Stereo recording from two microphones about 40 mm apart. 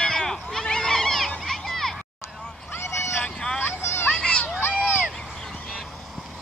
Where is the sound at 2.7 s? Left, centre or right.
Left.